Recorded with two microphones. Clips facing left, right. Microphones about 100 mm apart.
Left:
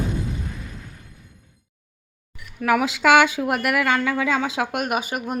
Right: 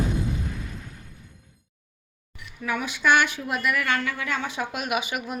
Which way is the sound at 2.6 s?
90° left.